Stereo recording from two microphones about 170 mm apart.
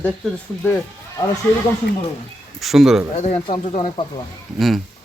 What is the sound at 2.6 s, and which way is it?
Speech, centre (ahead or behind).